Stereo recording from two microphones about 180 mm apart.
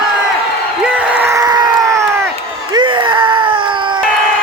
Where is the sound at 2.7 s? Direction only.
25° right (ahead or behind).